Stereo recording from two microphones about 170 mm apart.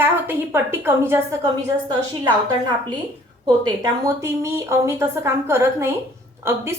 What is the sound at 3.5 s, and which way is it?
A woman's voice, 25° right (ahead or behind).